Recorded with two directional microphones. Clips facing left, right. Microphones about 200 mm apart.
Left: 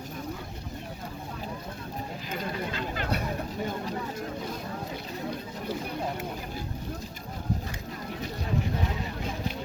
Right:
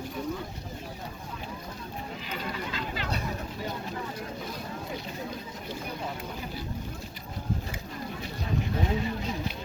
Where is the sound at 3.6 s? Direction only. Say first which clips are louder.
Left 2 dB; 45° left (ahead or behind).